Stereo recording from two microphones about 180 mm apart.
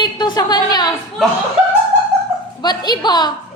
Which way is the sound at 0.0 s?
25° left (ahead or behind).